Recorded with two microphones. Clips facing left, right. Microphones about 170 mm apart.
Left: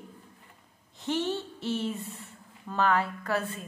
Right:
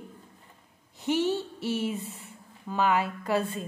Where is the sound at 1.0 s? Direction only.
10° right (ahead or behind).